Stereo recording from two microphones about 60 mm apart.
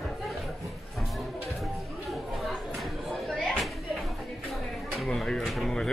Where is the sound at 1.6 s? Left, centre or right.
Centre.